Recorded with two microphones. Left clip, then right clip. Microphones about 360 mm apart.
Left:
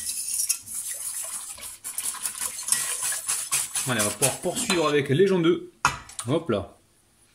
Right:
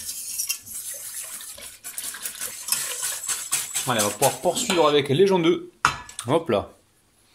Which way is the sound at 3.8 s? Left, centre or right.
Right.